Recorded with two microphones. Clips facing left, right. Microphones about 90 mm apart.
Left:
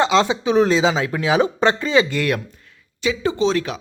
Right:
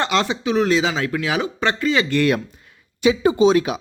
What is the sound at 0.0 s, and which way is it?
Speech, 20° left (ahead or behind).